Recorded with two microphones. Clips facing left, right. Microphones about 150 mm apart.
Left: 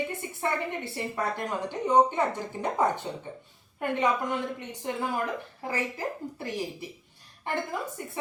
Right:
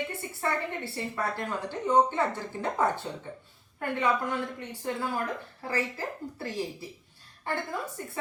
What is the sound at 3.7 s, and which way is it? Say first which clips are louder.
A woman's voice: left 1 dB; 20° left (ahead or behind).